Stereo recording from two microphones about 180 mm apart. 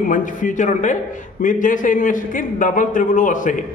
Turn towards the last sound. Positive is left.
turn(degrees=45)  # may be behind; listen again after turning